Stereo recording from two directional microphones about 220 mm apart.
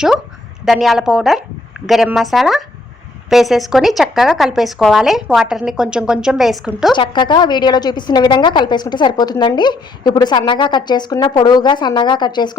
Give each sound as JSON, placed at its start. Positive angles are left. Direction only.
{"t": 0.6, "sound": "a woman's voice", "side_deg": 0}
{"t": 6.9, "sound": "a woman's voice", "side_deg": 20}